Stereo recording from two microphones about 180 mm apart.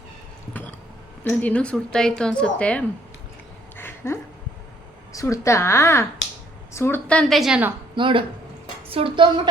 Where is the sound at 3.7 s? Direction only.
10° left (ahead or behind).